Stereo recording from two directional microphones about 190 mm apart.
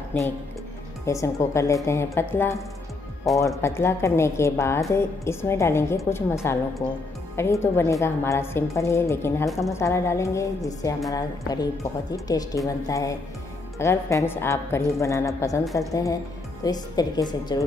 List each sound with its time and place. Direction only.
0.1 s a woman's voice: 10° left (ahead or behind)